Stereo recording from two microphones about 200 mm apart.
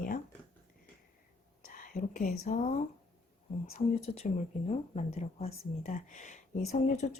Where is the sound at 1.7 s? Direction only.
40° left (ahead or behind).